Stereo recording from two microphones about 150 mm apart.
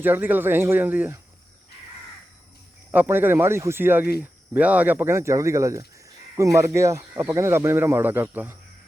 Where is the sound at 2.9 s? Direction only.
15° right (ahead or behind).